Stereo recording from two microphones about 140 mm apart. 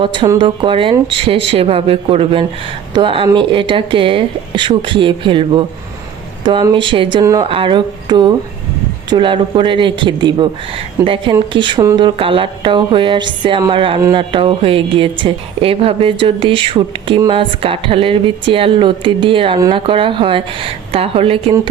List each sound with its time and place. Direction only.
0.0 s speech: 40° right (ahead or behind)